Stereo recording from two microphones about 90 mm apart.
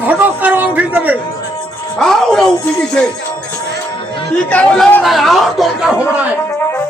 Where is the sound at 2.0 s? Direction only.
5° left (ahead or behind).